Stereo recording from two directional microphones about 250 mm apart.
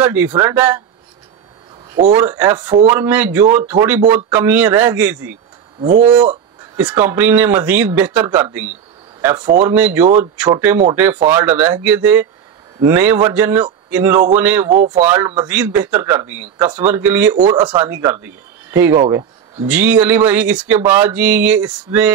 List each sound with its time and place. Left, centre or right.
0.0 s speech: centre
2.0 s speech: centre